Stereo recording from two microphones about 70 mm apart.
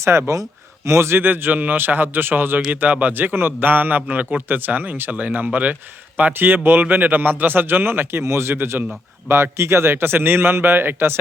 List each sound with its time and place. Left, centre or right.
0.0 s a man's voice: right